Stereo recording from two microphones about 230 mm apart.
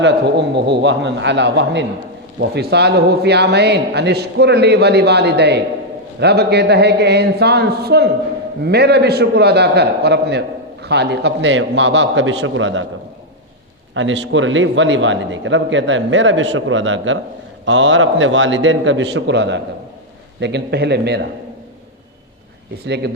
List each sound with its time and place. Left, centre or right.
0.0 s a man's voice: right
13.9 s a man's voice: right